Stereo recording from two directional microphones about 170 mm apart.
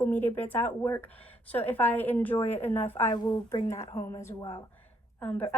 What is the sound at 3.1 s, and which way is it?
Speech, 25° left (ahead or behind).